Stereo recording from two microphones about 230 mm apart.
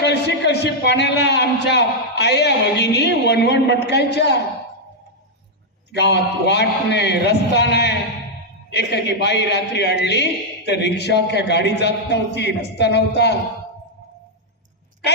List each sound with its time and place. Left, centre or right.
0.0 s a man's voice: left
5.9 s a man's voice: left